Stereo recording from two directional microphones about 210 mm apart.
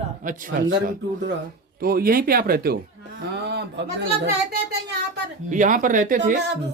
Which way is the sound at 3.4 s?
50° right (ahead or behind).